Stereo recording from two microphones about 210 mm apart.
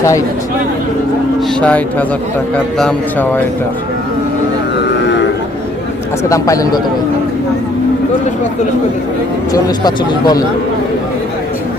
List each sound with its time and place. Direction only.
1.6 s a man's voice: 5° left (ahead or behind)
6.2 s speech: 15° left (ahead or behind)
9.5 s speech: 20° left (ahead or behind)